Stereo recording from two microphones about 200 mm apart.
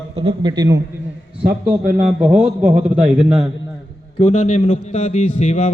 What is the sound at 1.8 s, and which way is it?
Speech, 45° right (ahead or behind).